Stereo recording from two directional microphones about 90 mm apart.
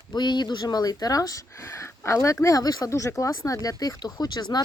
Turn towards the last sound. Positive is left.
turn(degrees=50)  # may be behind; listen again after turning